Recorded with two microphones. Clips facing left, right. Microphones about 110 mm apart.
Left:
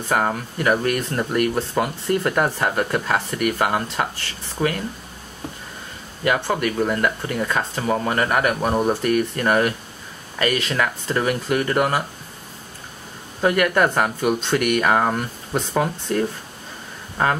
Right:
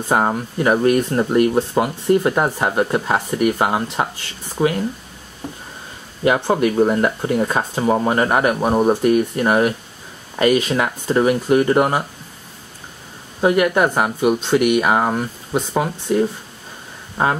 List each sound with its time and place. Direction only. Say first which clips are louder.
0.1 s speech: right 3 dB; 25° right (ahead or behind)
6.2 s speech: right 5 dB; 25° right (ahead or behind)
13.4 s speech: right 3 dB; 15° right (ahead or behind)